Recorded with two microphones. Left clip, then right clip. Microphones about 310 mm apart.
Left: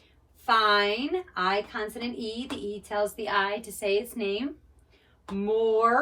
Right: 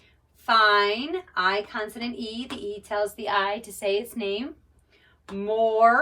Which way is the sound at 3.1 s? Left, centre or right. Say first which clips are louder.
Right 2 dB; centre.